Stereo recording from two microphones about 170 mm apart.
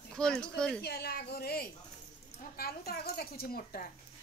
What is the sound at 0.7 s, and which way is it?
Speech, 65° left (ahead or behind).